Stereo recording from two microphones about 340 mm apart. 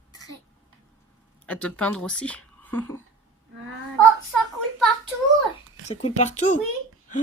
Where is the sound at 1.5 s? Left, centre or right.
Centre.